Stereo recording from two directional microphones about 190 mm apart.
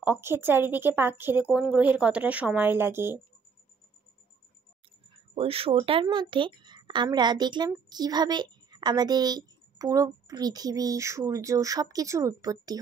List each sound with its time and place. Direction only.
0.0 s a woman's voice: 10° right (ahead or behind)
5.3 s a woman's voice: 30° right (ahead or behind)